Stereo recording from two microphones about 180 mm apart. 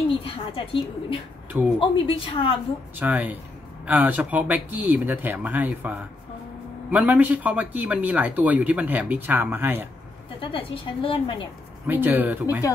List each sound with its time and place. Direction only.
0.1 s a woman's voice: 30° left (ahead or behind)
3.0 s speech: 10° right (ahead or behind)
10.4 s a woman's voice: 30° left (ahead or behind)
11.9 s speech: 10° right (ahead or behind)